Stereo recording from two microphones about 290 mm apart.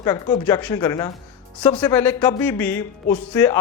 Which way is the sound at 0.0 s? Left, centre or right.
Centre.